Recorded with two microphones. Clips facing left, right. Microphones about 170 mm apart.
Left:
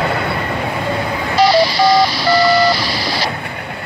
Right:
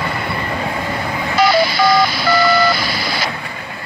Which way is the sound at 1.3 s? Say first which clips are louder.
Left 2 dB; 35° left (ahead or behind).